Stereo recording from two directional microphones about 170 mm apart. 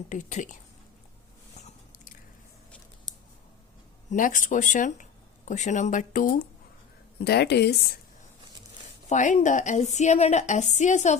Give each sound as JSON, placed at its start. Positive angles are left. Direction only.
{"t": 0.1, "sound": "a woman's voice", "side_deg": 45}
{"t": 1.5, "sound": "biting", "side_deg": 45}
{"t": 4.1, "sound": "a woman's voice", "side_deg": 50}
{"t": 7.2, "sound": "a woman's voice", "side_deg": 75}
{"t": 9.0, "sound": "a woman's voice", "side_deg": 45}